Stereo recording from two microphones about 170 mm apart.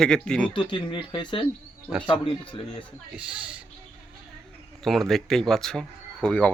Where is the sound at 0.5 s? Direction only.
30° left (ahead or behind).